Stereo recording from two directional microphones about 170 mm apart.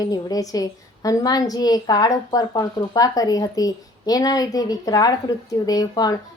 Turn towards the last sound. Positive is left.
turn(degrees=20)  # may be behind; listen again after turning